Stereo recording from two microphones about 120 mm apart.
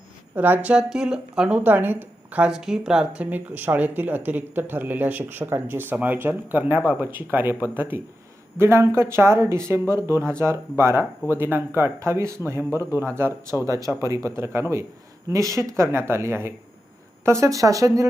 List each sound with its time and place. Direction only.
0.3 s speech: 15° right (ahead or behind)